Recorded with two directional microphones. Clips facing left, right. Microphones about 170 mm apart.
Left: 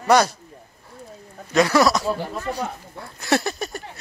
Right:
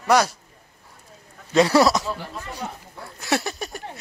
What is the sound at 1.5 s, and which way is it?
Speech, 30° right (ahead or behind).